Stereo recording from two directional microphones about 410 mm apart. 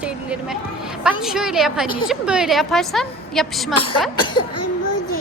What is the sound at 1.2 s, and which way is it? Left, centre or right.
A woman's voice, centre.